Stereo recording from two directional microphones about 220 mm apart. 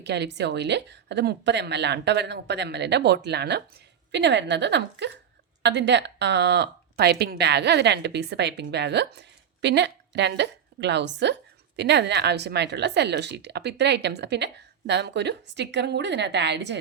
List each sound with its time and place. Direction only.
0.0 s speech: 50° right (ahead or behind)